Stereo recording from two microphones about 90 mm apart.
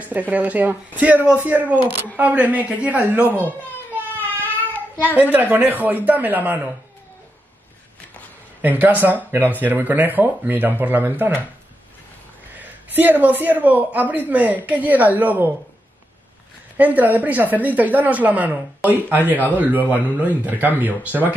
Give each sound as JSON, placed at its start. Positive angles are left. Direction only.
{"t": 0.0, "sound": "a woman's voice", "side_deg": -15}
{"t": 5.0, "sound": "speech", "side_deg": -20}
{"t": 8.6, "sound": "speech", "side_deg": -20}
{"t": 12.5, "sound": "a woman's voice", "side_deg": -20}
{"t": 16.7, "sound": "a woman's voice", "side_deg": -20}